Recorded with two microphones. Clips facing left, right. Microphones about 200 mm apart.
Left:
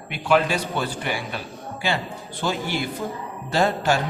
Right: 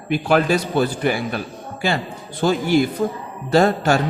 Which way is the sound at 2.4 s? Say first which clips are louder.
Right 9 dB; 45° right (ahead or behind).